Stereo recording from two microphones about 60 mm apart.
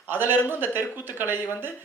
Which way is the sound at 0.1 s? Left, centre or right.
Right.